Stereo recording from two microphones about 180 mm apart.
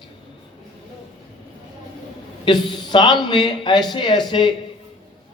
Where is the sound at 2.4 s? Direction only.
25° left (ahead or behind).